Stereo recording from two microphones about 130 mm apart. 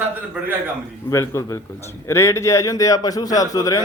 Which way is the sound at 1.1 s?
25° left (ahead or behind).